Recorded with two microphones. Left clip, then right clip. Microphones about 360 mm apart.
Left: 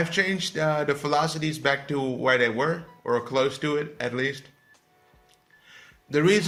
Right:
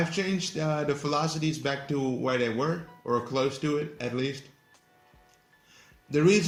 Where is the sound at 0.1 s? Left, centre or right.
Left.